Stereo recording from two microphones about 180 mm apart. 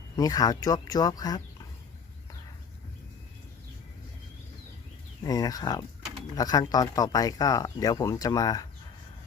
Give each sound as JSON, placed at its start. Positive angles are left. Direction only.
{"t": 0.2, "sound": "speech", "side_deg": 20}
{"t": 5.2, "sound": "speech", "side_deg": 20}